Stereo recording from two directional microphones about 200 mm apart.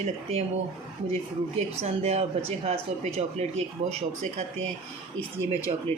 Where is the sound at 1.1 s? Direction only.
30° right (ahead or behind).